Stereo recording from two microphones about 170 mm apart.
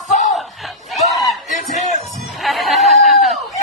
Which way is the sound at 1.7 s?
45° left (ahead or behind).